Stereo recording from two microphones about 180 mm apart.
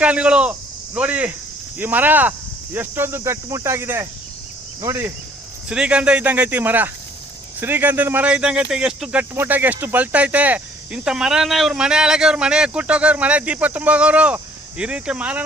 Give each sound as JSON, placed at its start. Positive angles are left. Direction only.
{"t": 0.0, "sound": "speech", "side_deg": -5}